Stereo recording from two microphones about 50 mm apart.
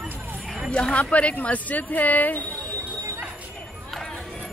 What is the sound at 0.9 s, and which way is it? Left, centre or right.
Speech, left.